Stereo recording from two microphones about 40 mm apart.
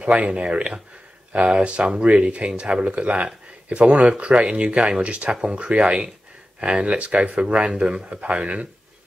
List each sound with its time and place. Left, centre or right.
0.0 s speech: right